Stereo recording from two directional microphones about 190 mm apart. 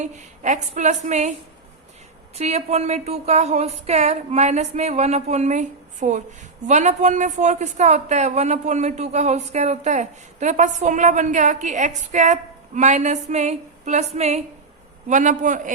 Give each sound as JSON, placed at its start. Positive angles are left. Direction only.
{"t": 0.0, "sound": "a woman's voice", "side_deg": -40}
{"t": 2.3, "sound": "a woman's voice", "side_deg": -35}